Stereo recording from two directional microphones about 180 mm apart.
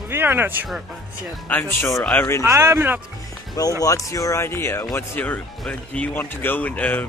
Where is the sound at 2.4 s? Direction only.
15° right (ahead or behind).